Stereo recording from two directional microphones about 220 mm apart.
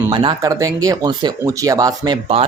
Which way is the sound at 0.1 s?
20° right (ahead or behind).